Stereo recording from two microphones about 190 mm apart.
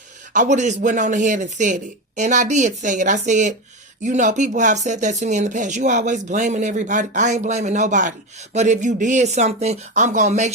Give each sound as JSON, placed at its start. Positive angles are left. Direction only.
{"t": 0.3, "sound": "speech", "side_deg": -40}